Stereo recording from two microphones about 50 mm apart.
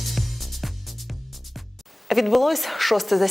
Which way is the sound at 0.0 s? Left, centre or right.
Centre.